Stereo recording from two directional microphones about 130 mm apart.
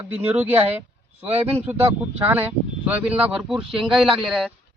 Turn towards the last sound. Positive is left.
turn(degrees=0)  # may be behind; listen again after turning